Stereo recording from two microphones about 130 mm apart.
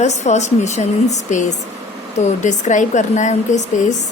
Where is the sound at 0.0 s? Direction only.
60° left (ahead or behind).